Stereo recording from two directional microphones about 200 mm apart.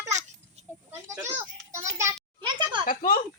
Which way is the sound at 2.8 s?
45° left (ahead or behind).